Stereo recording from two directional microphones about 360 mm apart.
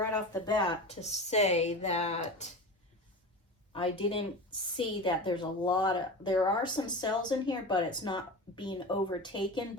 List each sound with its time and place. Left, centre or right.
0.0 s speech: centre
3.7 s speech: centre